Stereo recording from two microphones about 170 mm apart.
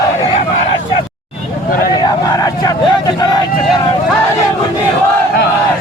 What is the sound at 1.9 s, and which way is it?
Vehicle, 25° left (ahead or behind).